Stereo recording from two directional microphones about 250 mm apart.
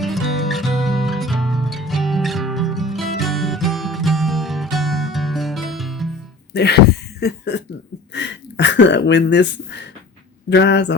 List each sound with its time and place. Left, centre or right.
0.0 s music: centre
6.5 s speech: left